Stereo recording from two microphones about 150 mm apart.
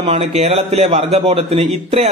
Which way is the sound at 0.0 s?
40° right (ahead or behind).